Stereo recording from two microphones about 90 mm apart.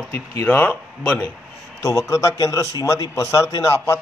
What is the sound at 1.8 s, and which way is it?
A man's voice, 35° left (ahead or behind).